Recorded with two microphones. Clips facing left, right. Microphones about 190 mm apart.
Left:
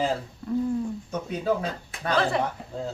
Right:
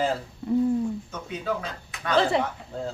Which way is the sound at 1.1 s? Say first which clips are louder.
Left 4 dB; 35° left (ahead or behind).